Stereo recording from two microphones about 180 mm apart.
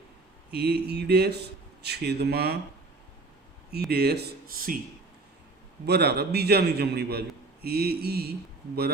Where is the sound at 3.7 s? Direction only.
60° right (ahead or behind).